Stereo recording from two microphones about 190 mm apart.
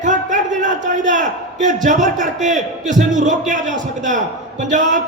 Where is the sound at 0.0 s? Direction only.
40° right (ahead or behind).